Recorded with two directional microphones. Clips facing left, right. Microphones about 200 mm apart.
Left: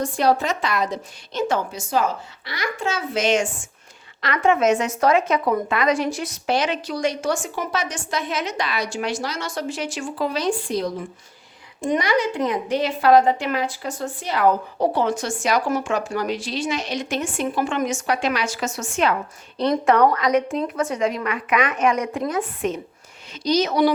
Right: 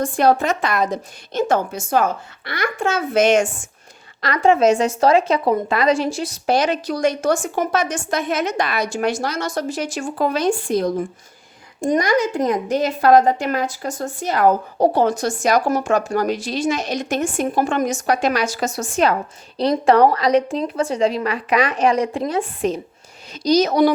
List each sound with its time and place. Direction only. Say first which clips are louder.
0.0 s a woman's voice: right 3 dB; 50° right (ahead or behind)
4.2 s a woman's voice: right 4 dB; 35° right (ahead or behind)